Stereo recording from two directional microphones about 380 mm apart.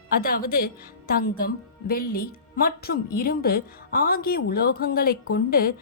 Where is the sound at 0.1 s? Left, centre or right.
Left.